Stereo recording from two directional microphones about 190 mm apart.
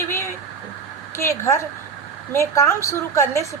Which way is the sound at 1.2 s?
15° left (ahead or behind).